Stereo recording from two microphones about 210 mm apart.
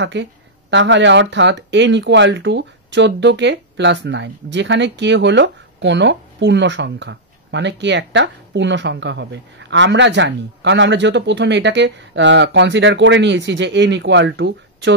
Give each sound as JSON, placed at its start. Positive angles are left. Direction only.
{"t": 0.0, "sound": "speech", "side_deg": -60}